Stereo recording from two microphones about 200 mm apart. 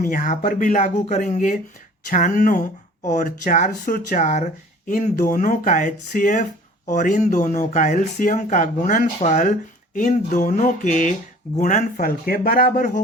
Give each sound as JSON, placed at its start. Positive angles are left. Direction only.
{"t": 0.0, "sound": "speech", "side_deg": 40}